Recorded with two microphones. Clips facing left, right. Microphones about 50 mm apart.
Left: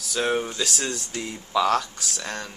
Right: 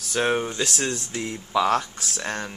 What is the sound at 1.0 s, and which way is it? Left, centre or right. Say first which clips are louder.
Speech: right 2 dB; centre.